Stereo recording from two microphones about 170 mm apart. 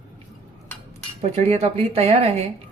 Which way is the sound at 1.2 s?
40° right (ahead or behind).